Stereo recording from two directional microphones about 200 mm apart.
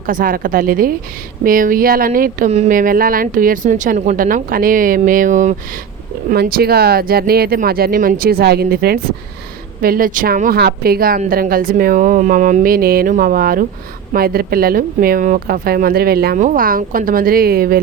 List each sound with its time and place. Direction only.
0.0 s speech: 45° right (ahead or behind)
6.3 s speech: 50° right (ahead or behind)